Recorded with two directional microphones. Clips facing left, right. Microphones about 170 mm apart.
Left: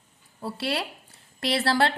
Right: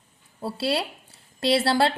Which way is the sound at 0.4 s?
30° right (ahead or behind).